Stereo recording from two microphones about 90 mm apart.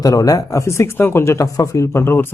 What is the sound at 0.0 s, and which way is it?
A man's voice, 45° left (ahead or behind).